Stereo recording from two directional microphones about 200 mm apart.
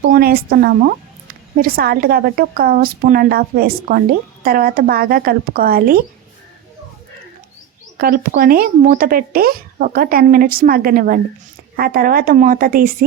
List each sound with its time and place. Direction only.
0.1 s speech: 50° right (ahead or behind)
7.9 s speech: 50° right (ahead or behind)